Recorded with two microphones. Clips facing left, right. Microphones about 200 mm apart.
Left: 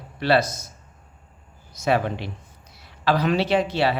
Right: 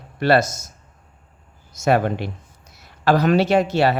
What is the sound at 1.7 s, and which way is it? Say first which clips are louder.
Speech: right 4 dB; 50° right (ahead or behind).